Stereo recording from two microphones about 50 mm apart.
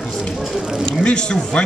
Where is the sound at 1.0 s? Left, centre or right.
Centre.